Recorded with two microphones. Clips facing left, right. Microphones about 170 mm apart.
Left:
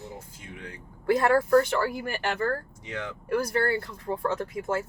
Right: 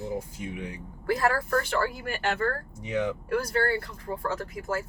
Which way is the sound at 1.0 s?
25° left (ahead or behind).